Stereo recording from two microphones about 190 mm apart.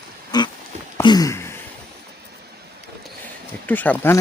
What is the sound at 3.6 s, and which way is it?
Speech, 10° left (ahead or behind).